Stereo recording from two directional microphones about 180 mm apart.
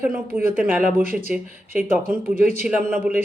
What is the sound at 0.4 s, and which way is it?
Speech, 50° right (ahead or behind).